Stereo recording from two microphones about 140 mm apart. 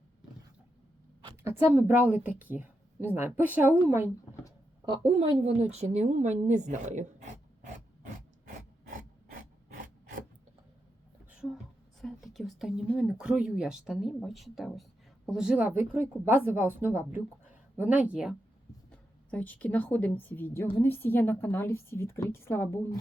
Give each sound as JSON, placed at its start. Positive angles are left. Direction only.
{"t": 1.5, "sound": "a woman's voice", "side_deg": -15}
{"t": 4.9, "sound": "a sound", "side_deg": -40}
{"t": 9.7, "sound": "filing", "side_deg": -70}
{"t": 11.3, "sound": "a sound", "side_deg": -5}
{"t": 13.0, "sound": "a woman's voice", "side_deg": -5}
{"t": 18.9, "sound": "a woman's voice", "side_deg": 10}